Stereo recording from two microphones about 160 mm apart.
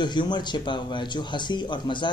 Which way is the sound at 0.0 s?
30° left (ahead or behind).